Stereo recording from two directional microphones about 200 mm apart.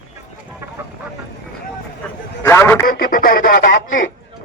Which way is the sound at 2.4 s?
10° left (ahead or behind).